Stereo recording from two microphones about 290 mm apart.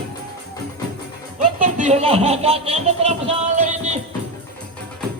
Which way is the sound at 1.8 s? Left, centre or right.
Right.